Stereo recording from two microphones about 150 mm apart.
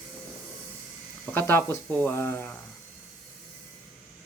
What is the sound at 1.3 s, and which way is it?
Speech, 15° left (ahead or behind).